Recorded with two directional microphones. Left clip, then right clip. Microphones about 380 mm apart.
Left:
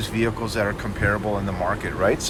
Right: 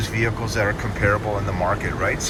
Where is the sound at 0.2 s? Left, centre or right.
Centre.